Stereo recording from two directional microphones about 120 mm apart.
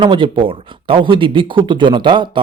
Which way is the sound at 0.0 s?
45° right (ahead or behind).